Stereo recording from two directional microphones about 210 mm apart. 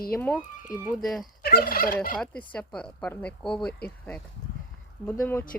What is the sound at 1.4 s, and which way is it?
Fowl, 45° left (ahead or behind).